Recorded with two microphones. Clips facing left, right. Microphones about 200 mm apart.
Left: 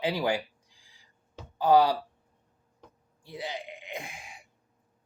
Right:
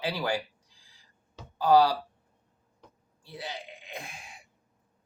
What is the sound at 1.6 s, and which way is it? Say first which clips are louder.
Speech: even; 20° left (ahead or behind).